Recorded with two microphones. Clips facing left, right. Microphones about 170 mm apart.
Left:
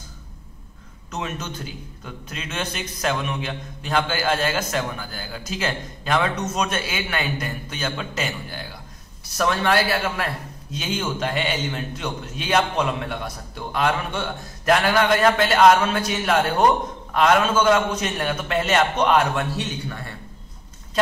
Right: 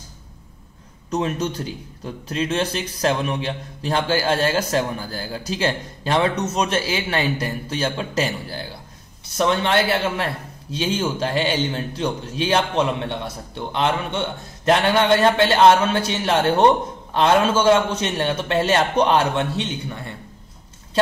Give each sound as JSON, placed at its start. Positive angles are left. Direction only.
{"t": 1.1, "sound": "a man's voice", "side_deg": -35}
{"t": 9.4, "sound": "a man's voice", "side_deg": -25}